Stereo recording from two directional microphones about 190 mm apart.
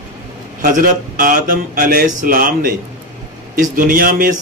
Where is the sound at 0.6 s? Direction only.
45° right (ahead or behind).